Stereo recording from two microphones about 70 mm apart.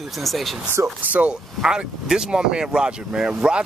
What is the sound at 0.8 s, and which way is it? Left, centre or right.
Speech, right.